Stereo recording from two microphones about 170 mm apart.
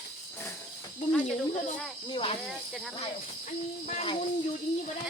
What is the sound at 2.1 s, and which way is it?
Speech, 35° left (ahead or behind).